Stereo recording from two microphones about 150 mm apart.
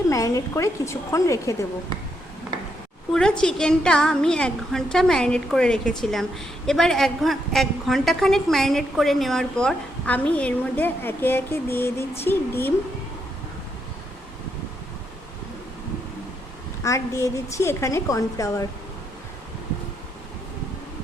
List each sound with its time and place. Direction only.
0.1 s a woman's voice: 20° left (ahead or behind)
3.1 s a woman's voice: 5° left (ahead or behind)
16.8 s a woman's voice: 20° left (ahead or behind)